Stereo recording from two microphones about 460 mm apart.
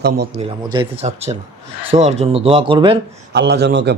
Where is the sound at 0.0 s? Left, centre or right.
Centre.